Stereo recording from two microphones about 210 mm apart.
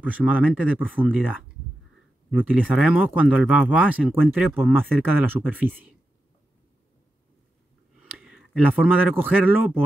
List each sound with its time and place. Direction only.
0.0 s speech: 5° right (ahead or behind)
2.5 s speech: 5° right (ahead or behind)
8.0 s speech: centre (ahead or behind)